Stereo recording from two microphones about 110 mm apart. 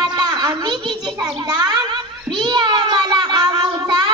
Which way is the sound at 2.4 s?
40° right (ahead or behind).